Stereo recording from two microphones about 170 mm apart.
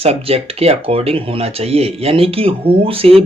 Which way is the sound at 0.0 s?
35° right (ahead or behind).